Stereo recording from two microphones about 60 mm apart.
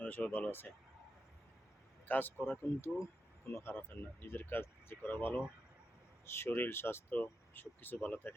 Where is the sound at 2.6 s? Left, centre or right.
Left.